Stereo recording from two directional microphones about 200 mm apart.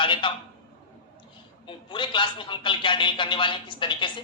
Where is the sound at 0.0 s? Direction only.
25° left (ahead or behind).